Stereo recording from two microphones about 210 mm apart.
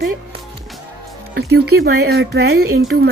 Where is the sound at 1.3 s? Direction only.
50° right (ahead or behind).